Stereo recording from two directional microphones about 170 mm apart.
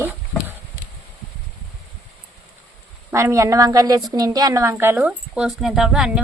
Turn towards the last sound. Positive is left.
turn(degrees=-5)  # may be behind; listen again after turning